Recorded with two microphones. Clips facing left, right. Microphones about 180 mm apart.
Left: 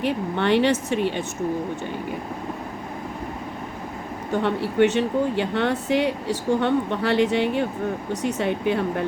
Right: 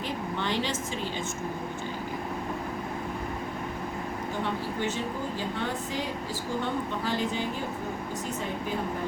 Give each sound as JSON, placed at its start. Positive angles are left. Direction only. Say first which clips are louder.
{"t": 0.0, "sound": "speech", "louder": "left 9 dB", "side_deg": 65}
{"t": 4.4, "sound": "speech", "louder": "left 13 dB", "side_deg": 70}